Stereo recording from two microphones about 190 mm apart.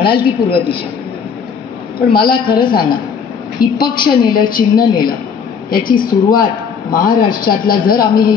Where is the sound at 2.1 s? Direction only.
50° left (ahead or behind).